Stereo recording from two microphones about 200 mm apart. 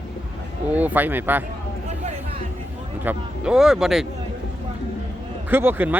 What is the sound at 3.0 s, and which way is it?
Speech, 5° right (ahead or behind).